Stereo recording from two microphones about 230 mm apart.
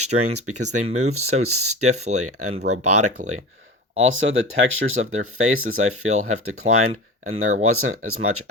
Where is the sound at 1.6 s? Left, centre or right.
Right.